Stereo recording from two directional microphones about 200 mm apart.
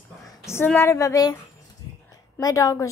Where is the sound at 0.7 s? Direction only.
10° left (ahead or behind).